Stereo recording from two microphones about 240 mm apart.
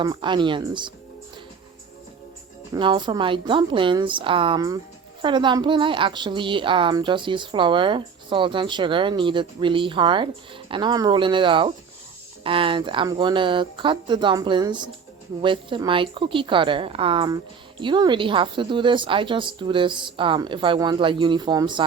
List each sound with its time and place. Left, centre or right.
0.0 s a woman's voice: centre
2.7 s a woman's voice: centre